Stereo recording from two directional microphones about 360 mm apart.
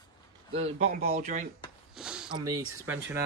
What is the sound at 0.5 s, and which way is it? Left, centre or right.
Speech, centre.